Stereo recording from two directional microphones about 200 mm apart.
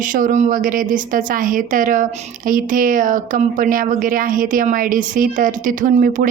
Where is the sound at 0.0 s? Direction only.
40° right (ahead or behind).